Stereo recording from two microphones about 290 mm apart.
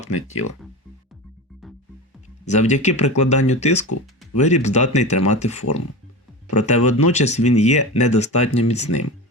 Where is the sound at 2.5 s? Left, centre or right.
Left.